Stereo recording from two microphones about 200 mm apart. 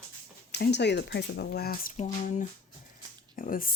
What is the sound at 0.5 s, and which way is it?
Speech, 60° left (ahead or behind).